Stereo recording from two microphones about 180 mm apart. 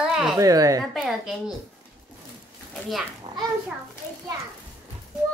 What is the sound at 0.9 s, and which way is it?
Speech, centre (ahead or behind).